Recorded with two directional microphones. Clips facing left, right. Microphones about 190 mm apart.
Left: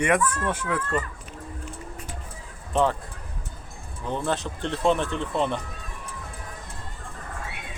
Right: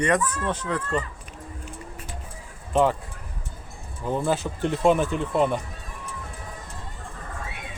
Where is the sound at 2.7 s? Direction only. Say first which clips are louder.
Right 2 dB; centre (ahead or behind).